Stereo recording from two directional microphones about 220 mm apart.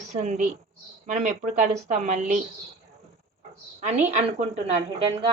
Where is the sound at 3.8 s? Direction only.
30° right (ahead or behind).